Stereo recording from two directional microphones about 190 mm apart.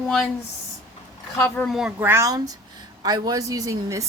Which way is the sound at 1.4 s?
5° left (ahead or behind).